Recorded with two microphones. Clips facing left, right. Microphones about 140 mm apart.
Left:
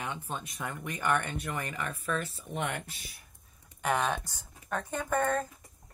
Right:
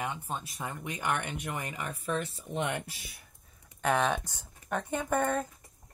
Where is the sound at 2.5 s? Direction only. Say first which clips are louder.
Right 2 dB; 30° right (ahead or behind).